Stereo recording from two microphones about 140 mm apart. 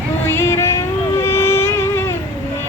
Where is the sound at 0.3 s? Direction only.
20° left (ahead or behind).